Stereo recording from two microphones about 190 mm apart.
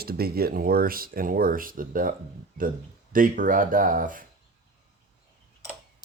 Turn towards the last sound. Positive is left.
turn(degrees=-45)  # may be behind; listen again after turning